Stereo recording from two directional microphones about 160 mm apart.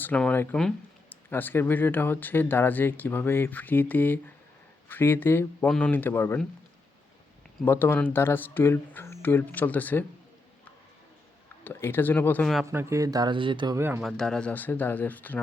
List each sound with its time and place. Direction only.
0.0 s speech: 10° left (ahead or behind)
7.6 s speech: 10° left (ahead or behind)
11.6 s speech: 15° left (ahead or behind)
12.6 s speech: 20° right (ahead or behind)
13.7 s speech: 15° right (ahead or behind)
14.0 s speech: 5° left (ahead or behind)